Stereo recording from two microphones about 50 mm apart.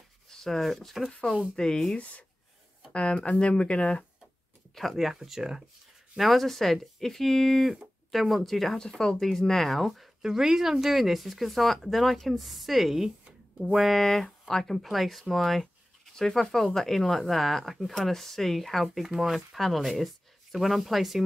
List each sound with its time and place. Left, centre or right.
0.3 s speech: centre
1.5 s speech: centre
2.0 s speech: left
4.7 s speech: centre
6.1 s speech: centre